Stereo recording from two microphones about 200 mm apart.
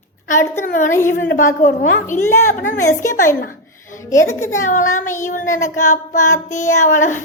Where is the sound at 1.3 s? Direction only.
40° left (ahead or behind).